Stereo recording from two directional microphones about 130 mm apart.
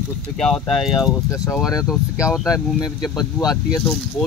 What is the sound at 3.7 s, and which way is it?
Speech, 15° left (ahead or behind).